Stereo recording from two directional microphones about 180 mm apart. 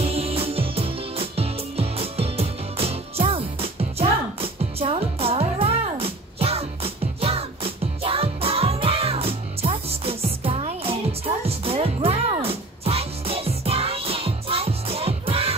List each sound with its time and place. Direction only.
0.1 s music: 30° right (ahead or behind)